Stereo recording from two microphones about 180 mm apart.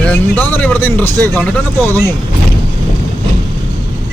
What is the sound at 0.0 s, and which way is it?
Speech, 10° left (ahead or behind).